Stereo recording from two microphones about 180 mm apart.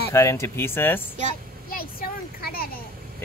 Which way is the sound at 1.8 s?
55° left (ahead or behind).